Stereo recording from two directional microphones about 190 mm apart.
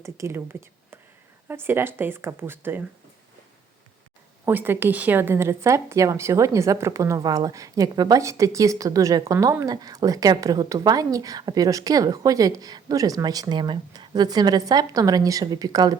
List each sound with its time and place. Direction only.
0.0 s speech: 15° right (ahead or behind)
1.5 s speech: 10° right (ahead or behind)
4.4 s a woman's voice: 10° right (ahead or behind)